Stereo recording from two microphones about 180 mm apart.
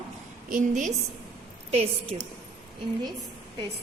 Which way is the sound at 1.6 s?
35° right (ahead or behind).